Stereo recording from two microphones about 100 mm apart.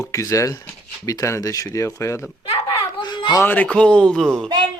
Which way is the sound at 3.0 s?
50° left (ahead or behind).